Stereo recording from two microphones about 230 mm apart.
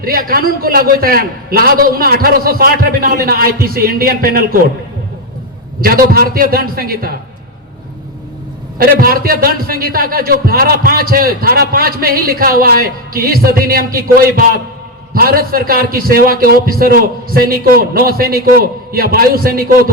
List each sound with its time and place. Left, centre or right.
0.0 s a man's voice: right
5.8 s a man's voice: right
8.8 s a man's voice: right